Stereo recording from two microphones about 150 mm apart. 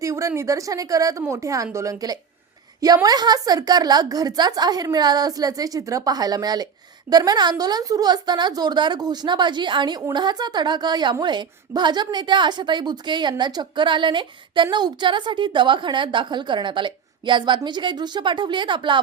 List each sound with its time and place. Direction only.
0.0 s a woman's voice: 20° right (ahead or behind)